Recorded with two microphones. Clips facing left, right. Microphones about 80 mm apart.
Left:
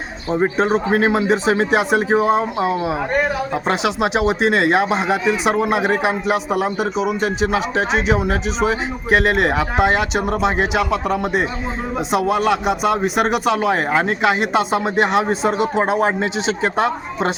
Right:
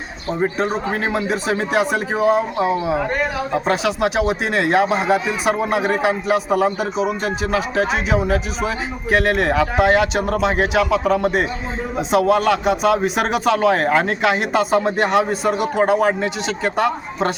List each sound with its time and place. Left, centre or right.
0.6 s a man's voice: left
4.0 s a man's voice: left